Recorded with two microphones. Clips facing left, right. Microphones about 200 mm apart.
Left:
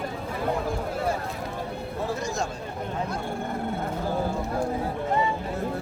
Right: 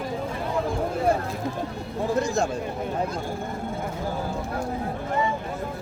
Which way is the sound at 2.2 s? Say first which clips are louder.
Right 5 dB; 55° right (ahead or behind).